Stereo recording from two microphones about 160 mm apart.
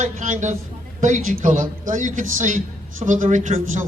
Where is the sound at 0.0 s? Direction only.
50° right (ahead or behind).